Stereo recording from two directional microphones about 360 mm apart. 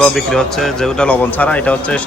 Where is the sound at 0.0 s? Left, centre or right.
Centre.